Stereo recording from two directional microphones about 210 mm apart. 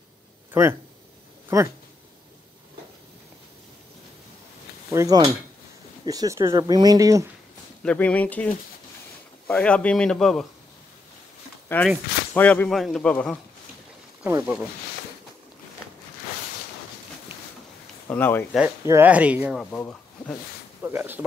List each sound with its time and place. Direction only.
0.5 s speech: 10° right (ahead or behind)
4.9 s speech: 20° right (ahead or behind)
7.8 s speech: 5° left (ahead or behind)
9.5 s speech: 5° left (ahead or behind)
12.4 s speech: 10° left (ahead or behind)
14.2 s speech: 5° right (ahead or behind)
18.0 s speech: 10° left (ahead or behind)
18.9 s speech: 10° right (ahead or behind)
20.8 s speech: 10° right (ahead or behind)